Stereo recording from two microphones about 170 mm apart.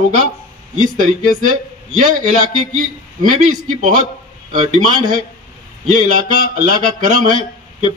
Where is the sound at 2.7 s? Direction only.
50° right (ahead or behind).